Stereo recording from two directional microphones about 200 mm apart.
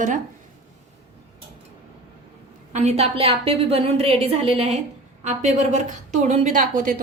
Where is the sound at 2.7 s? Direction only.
35° right (ahead or behind).